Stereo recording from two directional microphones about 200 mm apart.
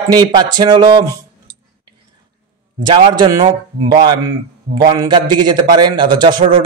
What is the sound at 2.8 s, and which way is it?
Speech, 20° right (ahead or behind).